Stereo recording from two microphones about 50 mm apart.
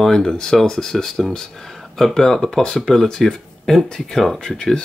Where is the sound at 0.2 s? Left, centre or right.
Centre.